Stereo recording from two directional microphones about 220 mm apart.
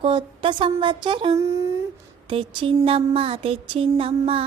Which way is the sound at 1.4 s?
10° right (ahead or behind).